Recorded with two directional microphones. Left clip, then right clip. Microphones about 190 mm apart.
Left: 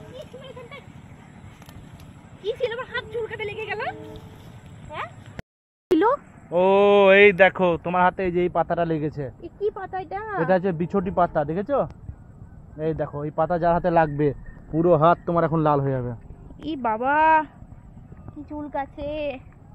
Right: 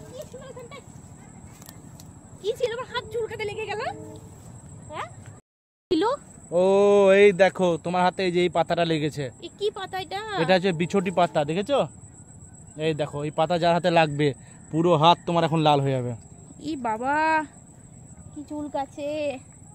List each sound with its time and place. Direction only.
2.6 s a sound: 15° right (ahead or behind)
5.9 s a sound: 40° left (ahead or behind)
6.5 s a sound: 15° right (ahead or behind)
6.9 s a man's voice: 5° right (ahead or behind)
9.8 s speech: 5° left (ahead or behind)
10.5 s a man's voice: 10° right (ahead or behind)
15.8 s a man's voice: 25° right (ahead or behind)
16.5 s a woman's voice: 10° left (ahead or behind)
18.4 s a man's voice: 15° right (ahead or behind)